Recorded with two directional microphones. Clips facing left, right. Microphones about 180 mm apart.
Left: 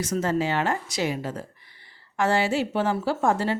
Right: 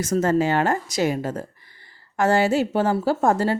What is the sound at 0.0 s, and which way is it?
A woman's voice, 45° right (ahead or behind).